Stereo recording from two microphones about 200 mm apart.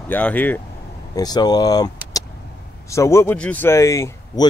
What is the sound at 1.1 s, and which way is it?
Speech, 20° left (ahead or behind).